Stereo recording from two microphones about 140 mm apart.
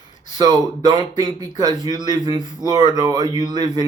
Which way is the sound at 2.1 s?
30° right (ahead or behind).